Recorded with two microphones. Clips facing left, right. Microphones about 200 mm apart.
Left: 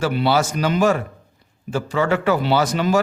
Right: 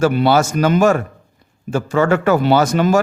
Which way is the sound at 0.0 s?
50° right (ahead or behind).